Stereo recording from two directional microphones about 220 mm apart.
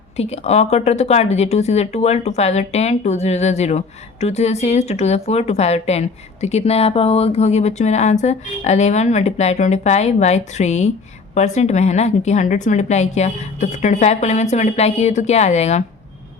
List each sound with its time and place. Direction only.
0.2 s a woman's voice: 30° left (ahead or behind)